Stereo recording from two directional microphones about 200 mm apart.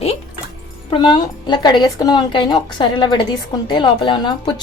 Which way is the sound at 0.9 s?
25° left (ahead or behind).